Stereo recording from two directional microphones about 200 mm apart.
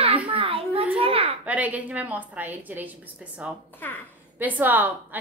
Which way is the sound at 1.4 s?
5° right (ahead or behind).